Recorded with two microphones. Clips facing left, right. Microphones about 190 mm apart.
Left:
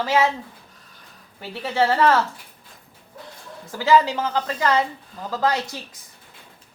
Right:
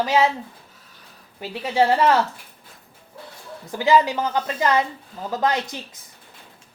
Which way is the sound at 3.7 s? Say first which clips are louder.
Even; 15° right (ahead or behind).